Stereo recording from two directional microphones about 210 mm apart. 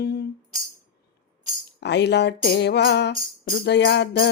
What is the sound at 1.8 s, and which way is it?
Music, 55° left (ahead or behind).